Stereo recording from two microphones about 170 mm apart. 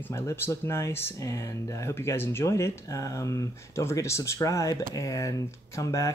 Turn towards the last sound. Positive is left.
turn(degrees=20)  # may be behind; listen again after turning